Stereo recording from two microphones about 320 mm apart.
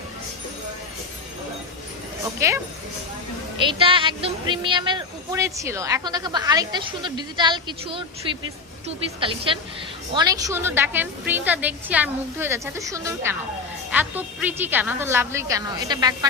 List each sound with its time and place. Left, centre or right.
2.4 s speech: centre
3.6 s speech: centre
9.2 s speech: centre